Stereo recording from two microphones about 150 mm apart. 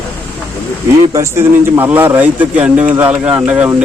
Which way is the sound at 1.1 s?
20° right (ahead or behind).